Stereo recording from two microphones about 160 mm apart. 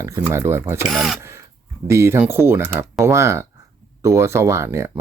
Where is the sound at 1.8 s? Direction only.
15° right (ahead or behind).